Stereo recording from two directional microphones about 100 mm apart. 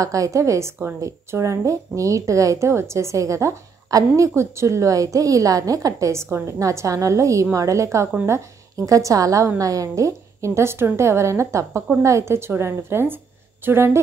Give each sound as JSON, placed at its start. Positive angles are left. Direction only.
{"t": 0.0, "sound": "a woman's voice", "side_deg": -35}